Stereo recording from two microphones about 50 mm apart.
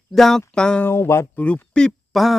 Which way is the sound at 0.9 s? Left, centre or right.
Left.